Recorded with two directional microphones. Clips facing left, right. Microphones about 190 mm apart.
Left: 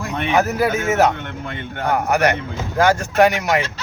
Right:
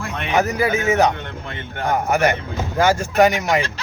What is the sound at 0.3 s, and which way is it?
Speech, 5° left (ahead or behind).